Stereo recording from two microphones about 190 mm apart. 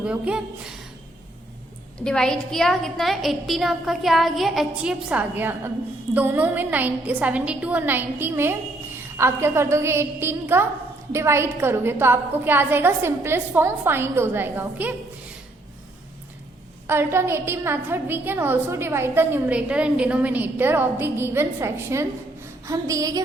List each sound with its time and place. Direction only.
0.0 s a woman's voice: 5° right (ahead or behind)
2.0 s a woman's voice: 5° left (ahead or behind)
16.8 s a woman's voice: 10° right (ahead or behind)